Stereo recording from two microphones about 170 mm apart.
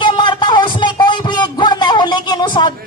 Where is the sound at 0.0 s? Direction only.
25° left (ahead or behind).